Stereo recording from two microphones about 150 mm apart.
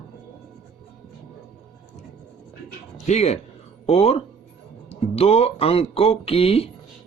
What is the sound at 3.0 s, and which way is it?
Speech, 45° left (ahead or behind).